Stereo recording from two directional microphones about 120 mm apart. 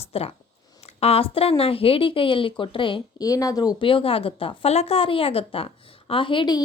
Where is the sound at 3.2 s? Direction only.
30° left (ahead or behind).